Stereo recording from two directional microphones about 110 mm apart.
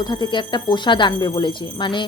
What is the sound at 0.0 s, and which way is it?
Speech, 40° left (ahead or behind).